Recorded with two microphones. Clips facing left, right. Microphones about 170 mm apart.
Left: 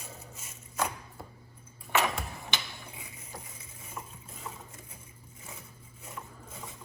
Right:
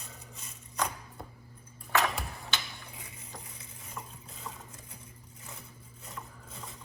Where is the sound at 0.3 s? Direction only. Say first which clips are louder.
Left 1 dB; 5° left (ahead or behind).